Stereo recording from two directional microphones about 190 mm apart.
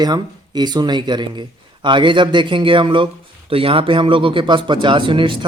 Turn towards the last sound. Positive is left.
turn(degrees=-25)  # may be behind; listen again after turning